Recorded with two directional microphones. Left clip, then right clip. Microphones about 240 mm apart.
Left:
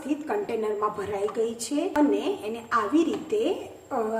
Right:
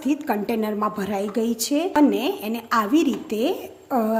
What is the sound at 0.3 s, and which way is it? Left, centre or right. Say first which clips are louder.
A woman's voice: right 3 dB; right.